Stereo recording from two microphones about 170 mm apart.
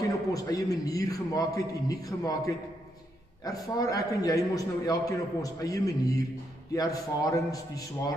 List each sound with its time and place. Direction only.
0.0 s a man's voice: 20° left (ahead or behind)